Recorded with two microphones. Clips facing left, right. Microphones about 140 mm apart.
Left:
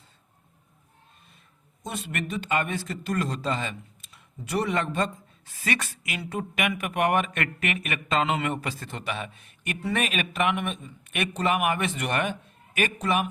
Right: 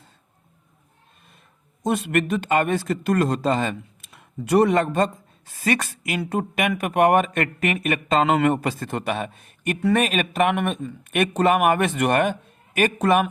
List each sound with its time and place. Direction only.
1.8 s speech: 55° right (ahead or behind)